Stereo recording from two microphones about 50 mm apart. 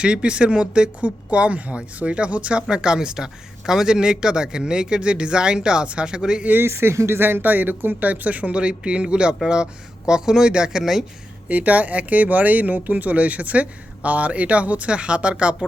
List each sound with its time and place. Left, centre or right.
0.0 s speech: right
6.7 s speech: right
7.2 s speech: right; by 11.0 s centre
11.4 s speech: right